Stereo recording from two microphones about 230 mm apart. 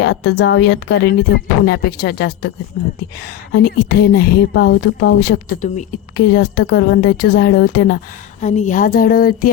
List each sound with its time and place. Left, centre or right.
0.0 s speech: left
3.5 s speech: left
5.6 s speech: left
6.3 s speech: left